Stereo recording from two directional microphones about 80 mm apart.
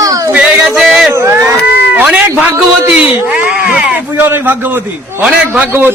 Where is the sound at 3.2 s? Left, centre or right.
Right.